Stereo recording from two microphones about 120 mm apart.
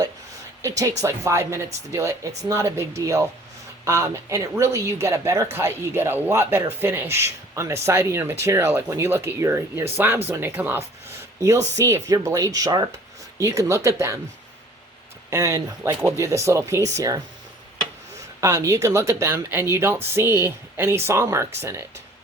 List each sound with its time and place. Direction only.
0.8 s speech: 25° right (ahead or behind)
15.3 s speech: 25° right (ahead or behind)
18.3 s speech: 25° right (ahead or behind)